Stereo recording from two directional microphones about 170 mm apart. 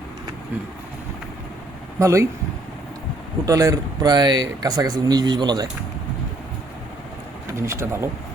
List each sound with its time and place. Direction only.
2.0 s speech: 15° right (ahead or behind)
3.4 s speech: 20° right (ahead or behind)
7.5 s speech: 15° right (ahead or behind)